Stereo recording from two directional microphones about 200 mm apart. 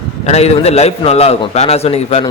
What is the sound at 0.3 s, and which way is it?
A man's voice, 30° left (ahead or behind).